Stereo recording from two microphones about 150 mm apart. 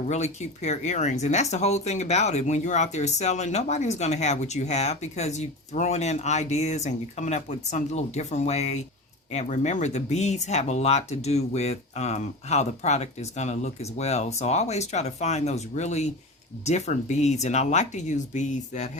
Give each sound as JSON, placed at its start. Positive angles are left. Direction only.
{"t": 0.1, "sound": "speech", "side_deg": 50}